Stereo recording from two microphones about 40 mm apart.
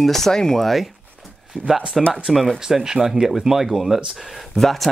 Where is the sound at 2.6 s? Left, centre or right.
Centre.